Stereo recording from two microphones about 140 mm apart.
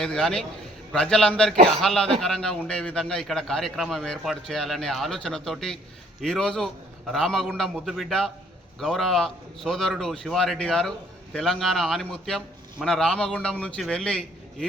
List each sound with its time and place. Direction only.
0.0 s a man's voice: 5° left (ahead or behind)
1.5 s a man's voice: 50° right (ahead or behind)
1.8 s a man's voice: centre (ahead or behind)